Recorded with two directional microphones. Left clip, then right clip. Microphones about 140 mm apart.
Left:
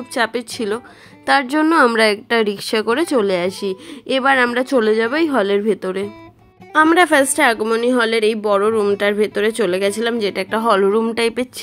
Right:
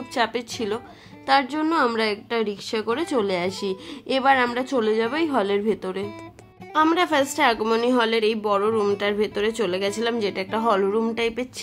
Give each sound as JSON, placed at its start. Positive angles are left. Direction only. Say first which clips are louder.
{"t": 0.1, "sound": "speech", "louder": "left 4 dB", "side_deg": 30}
{"t": 1.2, "sound": "speech", "louder": "left 5 dB", "side_deg": 45}
{"t": 6.7, "sound": "speech", "louder": "left 7 dB", "side_deg": 45}
{"t": 7.6, "sound": "speech", "louder": "left 4 dB", "side_deg": 25}